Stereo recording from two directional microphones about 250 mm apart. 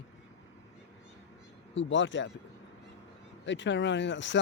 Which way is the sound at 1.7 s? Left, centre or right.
Left.